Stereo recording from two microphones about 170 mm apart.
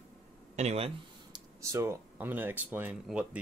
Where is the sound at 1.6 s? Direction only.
15° right (ahead or behind).